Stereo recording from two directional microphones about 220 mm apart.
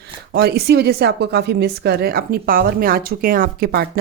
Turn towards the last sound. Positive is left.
turn(degrees=-45)  # may be behind; listen again after turning